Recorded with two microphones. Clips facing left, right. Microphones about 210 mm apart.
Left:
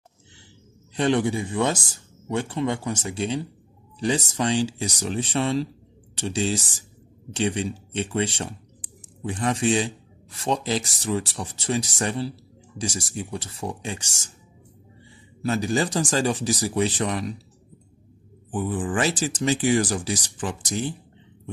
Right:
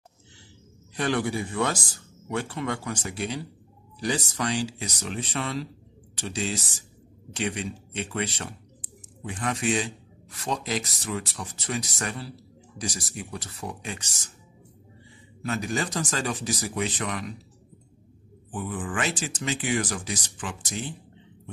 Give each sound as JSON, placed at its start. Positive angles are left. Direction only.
{"t": 0.9, "sound": "speech", "side_deg": 25}
{"t": 15.4, "sound": "speech", "side_deg": 30}
{"t": 18.5, "sound": "speech", "side_deg": 30}